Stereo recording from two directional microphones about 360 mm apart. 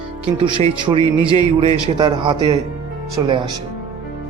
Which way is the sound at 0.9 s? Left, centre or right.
Centre.